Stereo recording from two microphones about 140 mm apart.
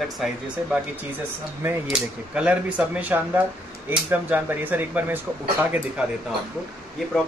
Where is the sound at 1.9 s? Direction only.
10° right (ahead or behind).